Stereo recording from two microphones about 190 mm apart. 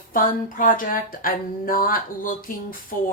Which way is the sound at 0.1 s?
45° left (ahead or behind).